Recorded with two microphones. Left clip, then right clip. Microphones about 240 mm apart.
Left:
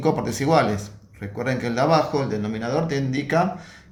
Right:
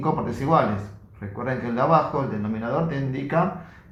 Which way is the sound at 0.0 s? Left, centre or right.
Left.